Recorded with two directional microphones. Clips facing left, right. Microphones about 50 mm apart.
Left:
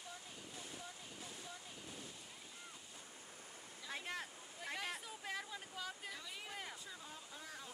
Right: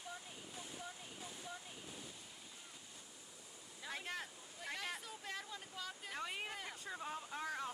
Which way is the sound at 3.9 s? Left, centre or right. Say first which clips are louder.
Even; centre.